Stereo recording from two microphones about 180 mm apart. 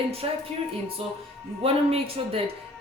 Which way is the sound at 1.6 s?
30° right (ahead or behind).